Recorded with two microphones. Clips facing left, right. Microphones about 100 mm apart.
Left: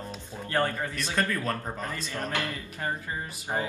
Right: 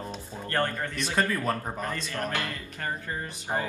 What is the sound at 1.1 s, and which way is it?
Speech, 15° right (ahead or behind).